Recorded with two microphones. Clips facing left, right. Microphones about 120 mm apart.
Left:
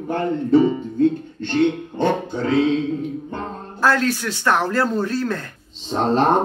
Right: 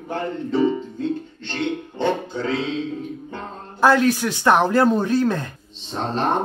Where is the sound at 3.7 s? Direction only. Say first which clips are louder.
Right 3 dB; 15° right (ahead or behind).